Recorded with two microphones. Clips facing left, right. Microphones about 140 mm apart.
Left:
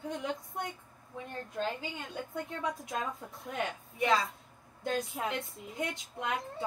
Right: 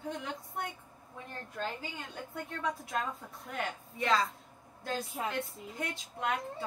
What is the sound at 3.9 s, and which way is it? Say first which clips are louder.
Speech: left 1 dB; 10° left (ahead or behind).